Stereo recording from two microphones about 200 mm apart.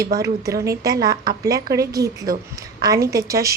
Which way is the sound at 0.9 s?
50° right (ahead or behind).